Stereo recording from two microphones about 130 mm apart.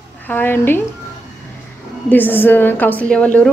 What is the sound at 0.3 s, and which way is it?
Speech, 15° left (ahead or behind).